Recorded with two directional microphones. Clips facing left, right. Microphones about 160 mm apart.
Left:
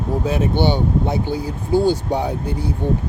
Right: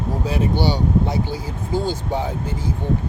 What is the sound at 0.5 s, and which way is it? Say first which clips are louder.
Speech: left 1 dB; 20° left (ahead or behind).